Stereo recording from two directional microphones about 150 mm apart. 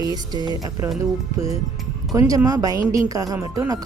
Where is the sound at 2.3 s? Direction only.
25° right (ahead or behind).